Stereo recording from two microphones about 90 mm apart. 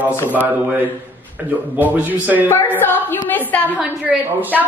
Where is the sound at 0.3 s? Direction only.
20° right (ahead or behind).